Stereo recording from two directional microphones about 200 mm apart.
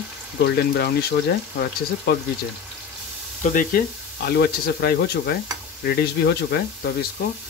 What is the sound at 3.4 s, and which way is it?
Speech, 40° left (ahead or behind).